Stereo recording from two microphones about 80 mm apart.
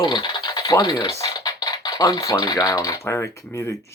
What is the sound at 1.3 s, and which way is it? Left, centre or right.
Speech, left.